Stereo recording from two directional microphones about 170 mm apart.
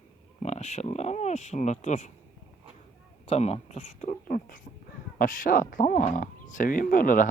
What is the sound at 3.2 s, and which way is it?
Speech, 40° left (ahead or behind).